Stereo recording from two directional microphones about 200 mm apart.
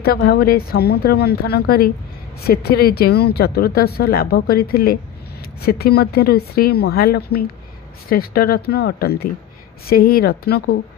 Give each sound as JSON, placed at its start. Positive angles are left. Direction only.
{"t": 0.0, "sound": "a woman's voice", "side_deg": 50}